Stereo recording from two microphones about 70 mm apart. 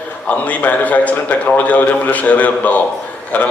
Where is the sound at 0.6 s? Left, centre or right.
Left.